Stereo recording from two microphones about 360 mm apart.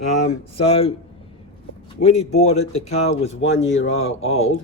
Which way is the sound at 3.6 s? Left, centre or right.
Left.